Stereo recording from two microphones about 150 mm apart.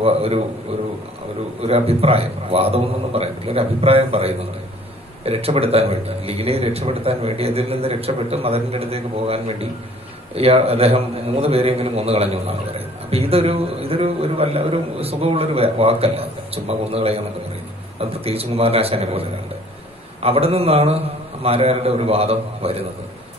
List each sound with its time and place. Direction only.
0.0 s a man's voice: 40° right (ahead or behind)
1.6 s a man's voice: 40° right (ahead or behind)